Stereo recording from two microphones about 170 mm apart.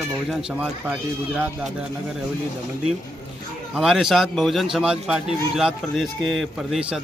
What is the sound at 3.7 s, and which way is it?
A man's voice, centre (ahead or behind).